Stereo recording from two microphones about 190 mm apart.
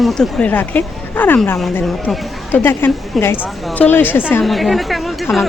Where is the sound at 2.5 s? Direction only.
10° left (ahead or behind).